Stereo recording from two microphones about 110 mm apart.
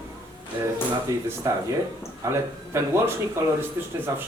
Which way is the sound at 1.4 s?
30° right (ahead or behind).